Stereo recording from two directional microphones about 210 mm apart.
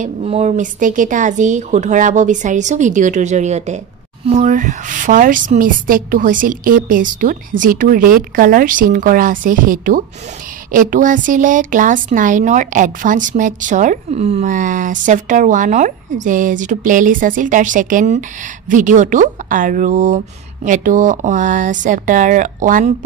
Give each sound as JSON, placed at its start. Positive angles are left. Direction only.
{"t": 0.0, "sound": "a woman's voice", "side_deg": -30}